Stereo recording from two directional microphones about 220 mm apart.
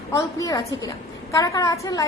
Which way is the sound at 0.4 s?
15° left (ahead or behind).